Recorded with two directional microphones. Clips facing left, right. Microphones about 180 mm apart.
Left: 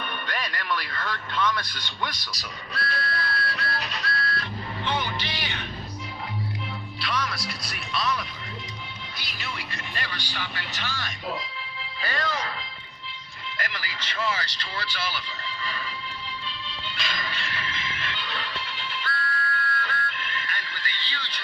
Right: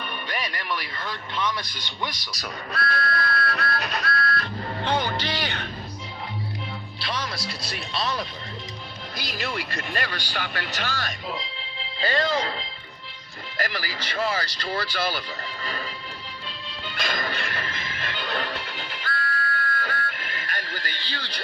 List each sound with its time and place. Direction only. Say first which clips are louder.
0.3 s speech: even; 10° right (ahead or behind)
2.4 s music: right 5 dB; 50° right (ahead or behind)
7.0 s music: left 1 dB; 30° right (ahead or behind)
9.1 s music: right 8 dB; 40° right (ahead or behind)
9.7 s speech: right 5 dB; 50° right (ahead or behind)
10.7 s speech: right 4 dB; 40° right (ahead or behind)
11.5 s music: right 1 dB; 25° right (ahead or behind)
13.6 s speech: right 6 dB; 35° right (ahead or behind)
16.6 s music: right 7 dB; 50° right (ahead or behind)